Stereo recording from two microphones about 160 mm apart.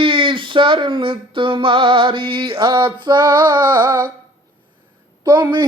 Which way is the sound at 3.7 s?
15° right (ahead or behind).